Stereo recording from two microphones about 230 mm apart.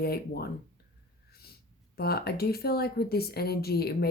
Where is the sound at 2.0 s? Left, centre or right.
Left.